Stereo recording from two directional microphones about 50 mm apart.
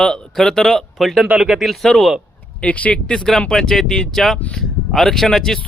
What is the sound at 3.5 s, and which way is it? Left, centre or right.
Speech, centre.